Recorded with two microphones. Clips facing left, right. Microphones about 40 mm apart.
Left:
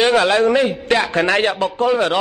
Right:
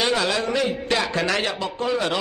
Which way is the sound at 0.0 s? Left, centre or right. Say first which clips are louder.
Left 8 dB; left.